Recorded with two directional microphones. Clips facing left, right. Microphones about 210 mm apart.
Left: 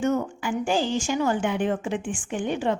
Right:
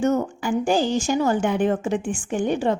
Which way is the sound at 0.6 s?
40° right (ahead or behind).